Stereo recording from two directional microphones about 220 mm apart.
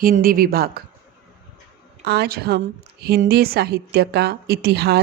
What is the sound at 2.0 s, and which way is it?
A woman's voice, 45° right (ahead or behind).